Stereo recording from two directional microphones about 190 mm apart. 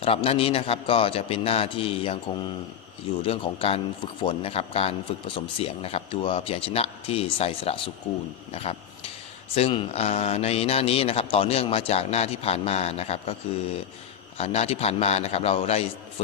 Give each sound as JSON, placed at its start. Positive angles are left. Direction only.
{"t": 0.0, "sound": "a man's voice", "side_deg": 30}
{"t": 14.3, "sound": "a man's voice", "side_deg": 35}